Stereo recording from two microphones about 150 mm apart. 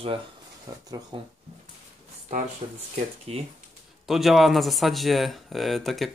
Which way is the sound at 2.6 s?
40° right (ahead or behind).